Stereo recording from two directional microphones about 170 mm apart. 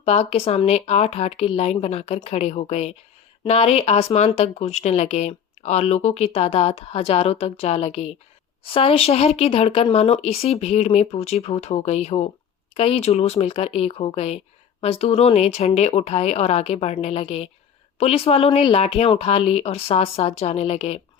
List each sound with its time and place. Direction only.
0.0 s speech: 40° left (ahead or behind)